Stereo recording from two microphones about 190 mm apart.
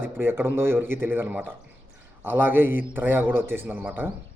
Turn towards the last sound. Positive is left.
turn(degrees=-10)  # may be behind; listen again after turning